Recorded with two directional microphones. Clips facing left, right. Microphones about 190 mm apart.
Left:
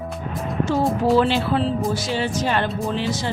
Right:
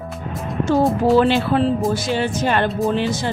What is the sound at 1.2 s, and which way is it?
Speech, 55° right (ahead or behind).